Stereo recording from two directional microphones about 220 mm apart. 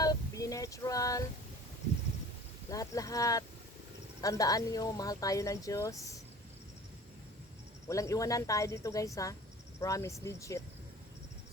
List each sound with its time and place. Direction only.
0.0 s a sound: 15° left (ahead or behind)
2.6 s speech: 15° left (ahead or behind)
7.9 s speech: 15° left (ahead or behind)